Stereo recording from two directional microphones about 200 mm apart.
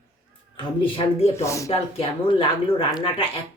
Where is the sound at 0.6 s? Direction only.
25° left (ahead or behind).